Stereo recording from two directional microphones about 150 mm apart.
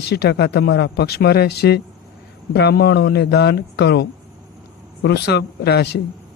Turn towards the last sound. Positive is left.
turn(degrees=90)